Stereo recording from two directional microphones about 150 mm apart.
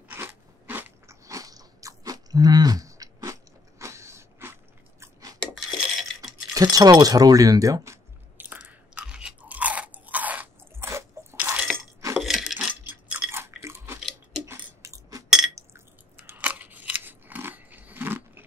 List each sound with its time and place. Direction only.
0.1 s biting: 15° right (ahead or behind)
5.0 s dishes: 25° right (ahead or behind)
5.7 s a sound: centre (ahead or behind)
6.5 s keys jangling: 25° right (ahead or behind); by 11.9 s 5° right (ahead or behind)
12.2 s coin: centre (ahead or behind)
12.9 s chewing: 10° right (ahead or behind)
14.4 s a sound: 20° right (ahead or behind)
15.2 s a sound: 5° right (ahead or behind)
15.5 s scissors: 15° right (ahead or behind)